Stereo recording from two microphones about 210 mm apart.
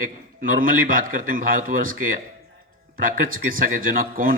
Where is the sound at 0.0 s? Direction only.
40° right (ahead or behind).